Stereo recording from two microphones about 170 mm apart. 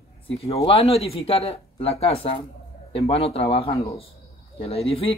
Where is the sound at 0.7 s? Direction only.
35° left (ahead or behind).